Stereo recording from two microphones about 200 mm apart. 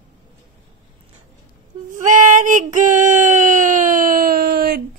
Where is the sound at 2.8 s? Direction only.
40° right (ahead or behind).